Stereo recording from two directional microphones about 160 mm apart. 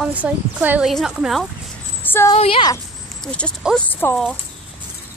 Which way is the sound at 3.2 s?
5° left (ahead or behind).